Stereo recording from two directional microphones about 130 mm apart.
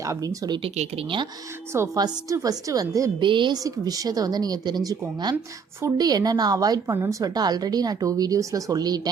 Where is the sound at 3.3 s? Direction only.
40° right (ahead or behind).